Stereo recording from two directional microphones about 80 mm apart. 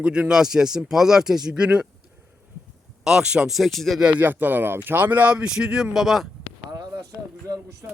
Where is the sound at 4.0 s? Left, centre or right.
Centre.